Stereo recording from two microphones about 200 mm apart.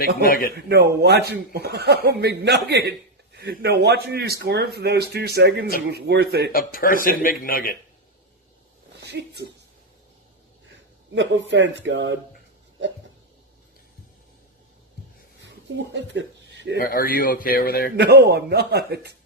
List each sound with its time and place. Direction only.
0.3 s speech: 45° left (ahead or behind)
0.5 s speech: 55° right (ahead or behind)
6.5 s speech: 45° left (ahead or behind)
9.0 s a sound: 55° right (ahead or behind)
11.1 s speech: 65° right (ahead or behind)
15.4 s a sound: 65° right (ahead or behind)
16.8 s speech: 45° left (ahead or behind)
17.9 s speech: 55° right (ahead or behind)